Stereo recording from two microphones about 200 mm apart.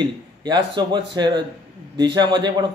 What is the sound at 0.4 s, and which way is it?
A man's voice, 20° right (ahead or behind).